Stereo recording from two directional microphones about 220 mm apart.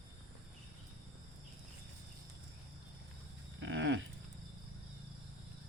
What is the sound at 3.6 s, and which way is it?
Goat, 55° right (ahead or behind).